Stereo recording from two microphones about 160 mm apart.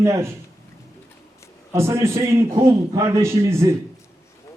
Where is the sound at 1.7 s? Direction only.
15° right (ahead or behind).